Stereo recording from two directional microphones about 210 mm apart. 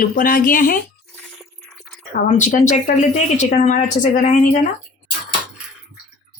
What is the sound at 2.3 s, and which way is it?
A woman's voice, 35° left (ahead or behind).